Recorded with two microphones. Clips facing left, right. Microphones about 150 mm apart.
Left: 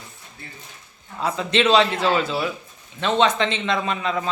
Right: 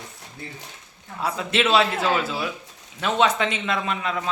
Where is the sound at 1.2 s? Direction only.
5° right (ahead or behind).